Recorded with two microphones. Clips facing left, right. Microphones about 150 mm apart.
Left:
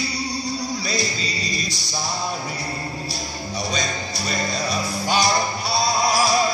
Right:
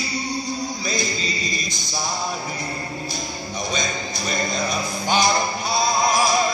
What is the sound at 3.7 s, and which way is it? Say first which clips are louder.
Music: even; 35° left (ahead or behind).